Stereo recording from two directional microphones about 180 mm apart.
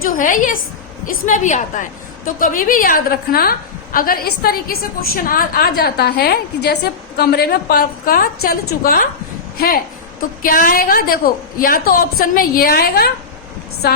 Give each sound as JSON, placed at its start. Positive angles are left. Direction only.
{"t": 0.0, "sound": "a woman's voice", "side_deg": 50}